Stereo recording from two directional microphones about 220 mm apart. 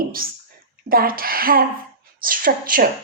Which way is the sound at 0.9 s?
40° right (ahead or behind).